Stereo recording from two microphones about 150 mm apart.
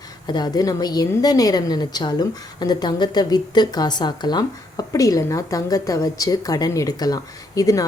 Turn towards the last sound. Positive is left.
turn(degrees=25)  # may be behind; listen again after turning